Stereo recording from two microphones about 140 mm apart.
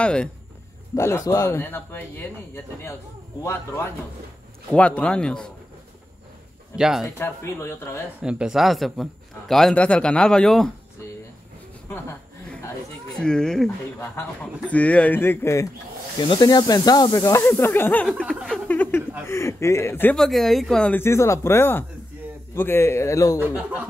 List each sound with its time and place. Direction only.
0.0 s speech: 5° left (ahead or behind)
0.9 s speech: 20° left (ahead or behind)
6.8 s a man's voice: 5° right (ahead or behind)
7.2 s speech: 15° left (ahead or behind)
8.2 s a man's voice: 5° right (ahead or behind)
13.1 s a man's voice: 5° left (ahead or behind)
14.7 s speech: 10° left (ahead or behind)
16.2 s speech: 30° left (ahead or behind); by 18.0 s 15° left (ahead or behind)
18.3 s a man's voice: 5° left (ahead or behind)
18.7 s a sound: 15° left (ahead or behind)
19.2 s speech: 20° left (ahead or behind)
20.2 s a man's voice: centre (ahead or behind)
21.0 s speech: 20° left (ahead or behind)